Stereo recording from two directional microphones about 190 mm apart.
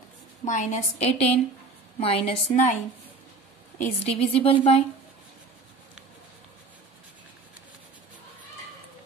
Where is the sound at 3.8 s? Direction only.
30° left (ahead or behind).